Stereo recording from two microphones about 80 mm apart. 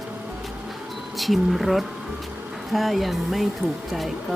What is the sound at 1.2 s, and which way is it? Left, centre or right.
Speech, centre.